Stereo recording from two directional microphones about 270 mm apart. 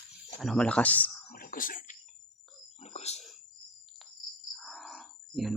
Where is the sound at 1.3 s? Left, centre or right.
Left.